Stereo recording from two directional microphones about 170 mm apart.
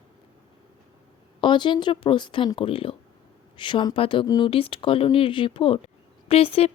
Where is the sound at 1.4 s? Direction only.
25° left (ahead or behind).